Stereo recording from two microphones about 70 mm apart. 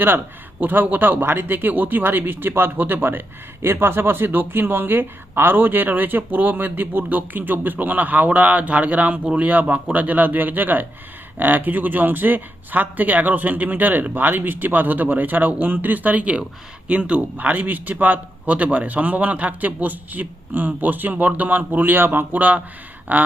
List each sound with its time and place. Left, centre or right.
0.6 s speech: right